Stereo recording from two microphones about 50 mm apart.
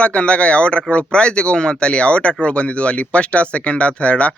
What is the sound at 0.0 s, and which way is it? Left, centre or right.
Speech, left.